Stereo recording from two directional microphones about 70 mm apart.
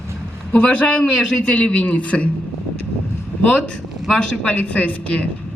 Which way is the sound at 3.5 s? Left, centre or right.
Centre.